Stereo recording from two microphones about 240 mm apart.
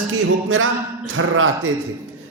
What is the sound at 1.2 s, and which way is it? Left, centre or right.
Speech, right.